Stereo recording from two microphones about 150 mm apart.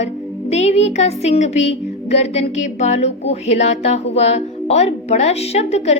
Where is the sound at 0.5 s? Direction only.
45° left (ahead or behind).